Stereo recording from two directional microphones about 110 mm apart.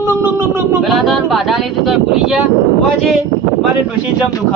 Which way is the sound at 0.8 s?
Centre (ahead or behind).